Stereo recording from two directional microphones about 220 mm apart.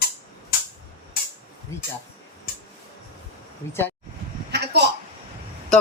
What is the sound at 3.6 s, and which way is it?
Speech, 10° left (ahead or behind).